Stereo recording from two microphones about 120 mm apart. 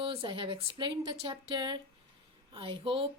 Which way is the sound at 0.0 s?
45° right (ahead or behind).